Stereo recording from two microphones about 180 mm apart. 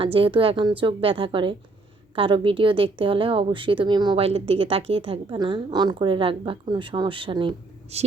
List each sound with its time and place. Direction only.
0.0 s a woman's voice: 30° right (ahead or behind)